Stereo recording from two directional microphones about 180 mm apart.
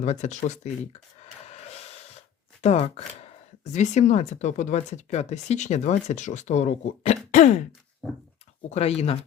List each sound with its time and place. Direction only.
0.0 s speech: 40° left (ahead or behind)
1.5 s gasp: 35° left (ahead or behind)
3.6 s speech: 40° left (ahead or behind)
8.7 s speech: 35° left (ahead or behind)